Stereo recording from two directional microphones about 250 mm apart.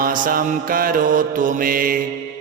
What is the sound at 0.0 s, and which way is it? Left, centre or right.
Mantra, right.